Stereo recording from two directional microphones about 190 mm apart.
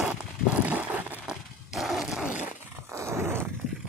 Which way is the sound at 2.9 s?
15° right (ahead or behind).